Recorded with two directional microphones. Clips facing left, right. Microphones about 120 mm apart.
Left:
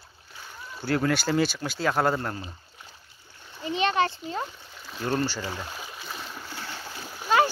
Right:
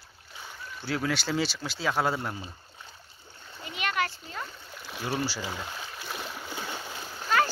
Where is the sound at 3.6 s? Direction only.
30° left (ahead or behind).